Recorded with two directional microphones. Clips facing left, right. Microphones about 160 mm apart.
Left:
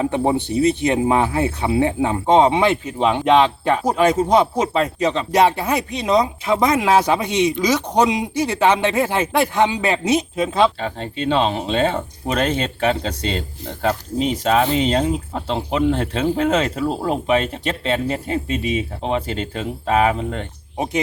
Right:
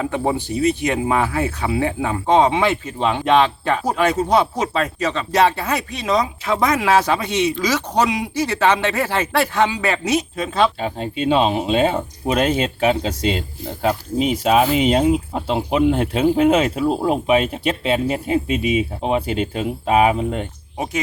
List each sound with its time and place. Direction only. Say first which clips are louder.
0.0 s speech: left 2 dB; 20° left (ahead or behind)
10.8 s speech: right 2 dB; 10° right (ahead or behind)